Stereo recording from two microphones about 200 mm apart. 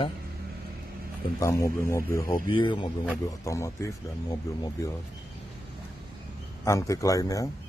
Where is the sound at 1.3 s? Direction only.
15° left (ahead or behind).